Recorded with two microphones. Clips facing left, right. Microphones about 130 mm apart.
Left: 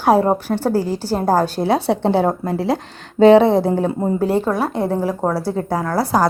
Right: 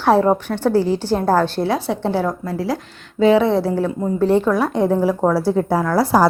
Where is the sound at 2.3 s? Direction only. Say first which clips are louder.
Left 3 dB; 25° left (ahead or behind).